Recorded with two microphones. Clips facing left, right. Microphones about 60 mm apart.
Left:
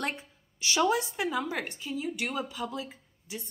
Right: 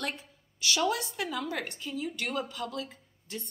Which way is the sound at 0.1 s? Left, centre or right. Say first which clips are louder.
Left 2 dB; left.